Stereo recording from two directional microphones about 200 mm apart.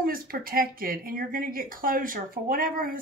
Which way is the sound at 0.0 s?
45° right (ahead or behind).